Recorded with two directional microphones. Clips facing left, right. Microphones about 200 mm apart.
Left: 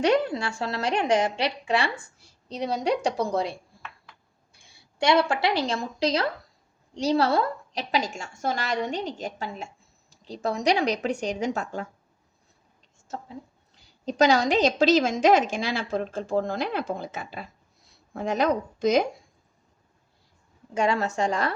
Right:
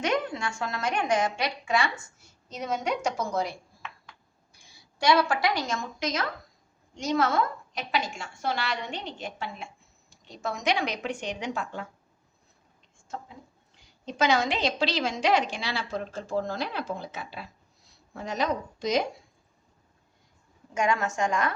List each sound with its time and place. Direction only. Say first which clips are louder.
0.0 s a woman's voice: left 6 dB; 35° left (ahead or behind)
4.9 s a woman's voice: left 2 dB; 25° left (ahead or behind); by 11.9 s 45° left (ahead or behind)
13.1 s a woman's voice: left 3 dB; 40° left (ahead or behind)
20.7 s a woman's voice: left 2 dB; 35° left (ahead or behind)